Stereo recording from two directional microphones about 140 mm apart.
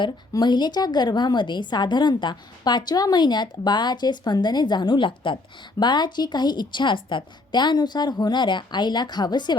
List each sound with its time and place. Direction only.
0.0 s a woman's voice: 30° left (ahead or behind)